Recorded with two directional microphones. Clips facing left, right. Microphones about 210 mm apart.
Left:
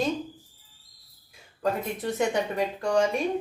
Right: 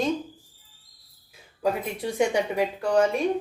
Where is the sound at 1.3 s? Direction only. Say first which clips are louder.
Right 2 dB; 10° right (ahead or behind).